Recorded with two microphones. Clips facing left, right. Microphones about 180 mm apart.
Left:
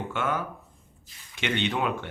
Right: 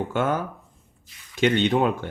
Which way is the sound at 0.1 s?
40° right (ahead or behind).